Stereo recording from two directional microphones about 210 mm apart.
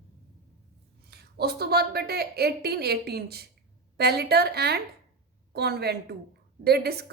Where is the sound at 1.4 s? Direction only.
50° right (ahead or behind).